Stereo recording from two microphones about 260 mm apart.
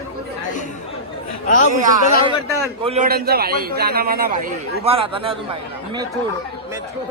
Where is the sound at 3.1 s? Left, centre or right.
Right.